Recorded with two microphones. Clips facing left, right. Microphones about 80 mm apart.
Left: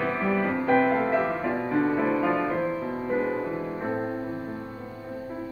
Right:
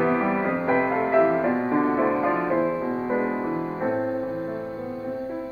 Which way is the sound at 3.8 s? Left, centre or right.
Centre.